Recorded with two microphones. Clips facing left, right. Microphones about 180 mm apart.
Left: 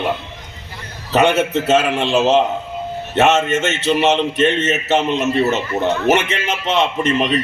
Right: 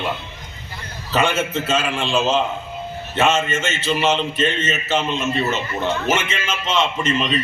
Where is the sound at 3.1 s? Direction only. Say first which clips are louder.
Left 4 dB; 70° left (ahead or behind).